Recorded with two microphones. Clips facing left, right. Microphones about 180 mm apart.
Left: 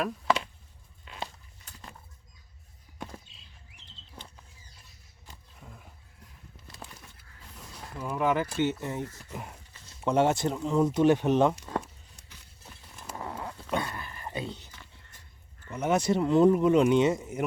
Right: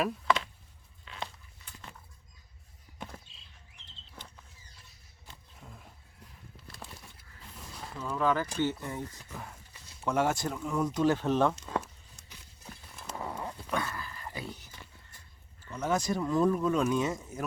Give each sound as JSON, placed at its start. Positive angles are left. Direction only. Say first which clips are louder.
{"t": 5.5, "sound": "a sound", "louder": "left 1 dB", "side_deg": 0}
{"t": 7.9, "sound": "speech", "louder": "left 2 dB", "side_deg": 15}
{"t": 13.7, "sound": "dog", "louder": "left 3 dB", "side_deg": 25}
{"t": 15.7, "sound": "speech", "louder": "left 4 dB", "side_deg": 20}